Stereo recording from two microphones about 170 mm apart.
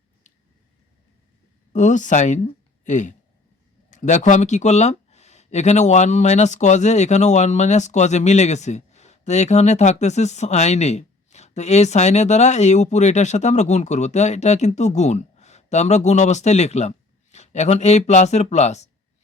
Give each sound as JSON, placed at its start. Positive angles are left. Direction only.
{"t": 1.7, "sound": "speech", "side_deg": 45}